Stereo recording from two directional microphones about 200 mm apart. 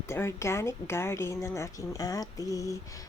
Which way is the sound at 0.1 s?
15° left (ahead or behind).